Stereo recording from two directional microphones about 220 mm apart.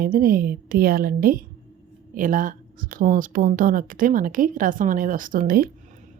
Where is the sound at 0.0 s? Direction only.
40° right (ahead or behind).